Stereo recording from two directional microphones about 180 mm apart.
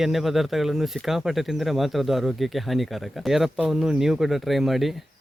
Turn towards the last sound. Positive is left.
turn(degrees=0)  # may be behind; listen again after turning